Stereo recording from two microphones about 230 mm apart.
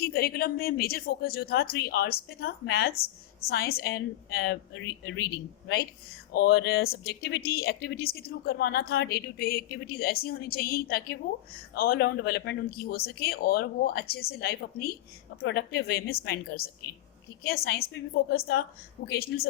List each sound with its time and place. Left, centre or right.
0.0 s speech: left